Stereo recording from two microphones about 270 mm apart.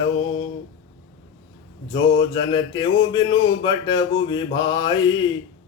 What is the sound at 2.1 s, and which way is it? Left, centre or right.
Mantra, centre.